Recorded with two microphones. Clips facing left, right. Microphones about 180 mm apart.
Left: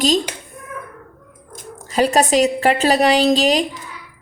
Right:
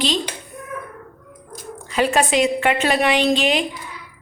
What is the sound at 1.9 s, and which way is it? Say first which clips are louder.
A woman's voice: left 3 dB; 40° left (ahead or behind).